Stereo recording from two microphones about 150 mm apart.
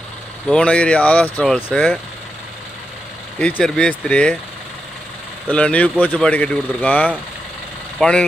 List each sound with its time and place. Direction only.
0.5 s speech: 5° left (ahead or behind)
3.3 s speech: 5° left (ahead or behind)
5.5 s speech: 10° left (ahead or behind)